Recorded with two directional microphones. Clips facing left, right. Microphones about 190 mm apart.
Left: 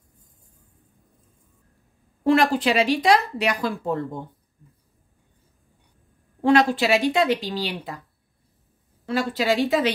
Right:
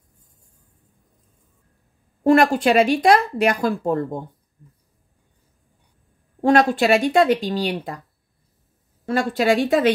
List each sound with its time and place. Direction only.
2.2 s a woman's voice: 50° right (ahead or behind)
6.4 s a woman's voice: 45° right (ahead or behind)
9.0 s a woman's voice: 50° right (ahead or behind)